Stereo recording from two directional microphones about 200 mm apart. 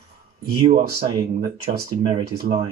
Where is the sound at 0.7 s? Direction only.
25° right (ahead or behind).